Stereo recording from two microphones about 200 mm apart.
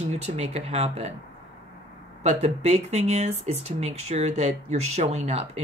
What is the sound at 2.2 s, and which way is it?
Speech, 35° right (ahead or behind).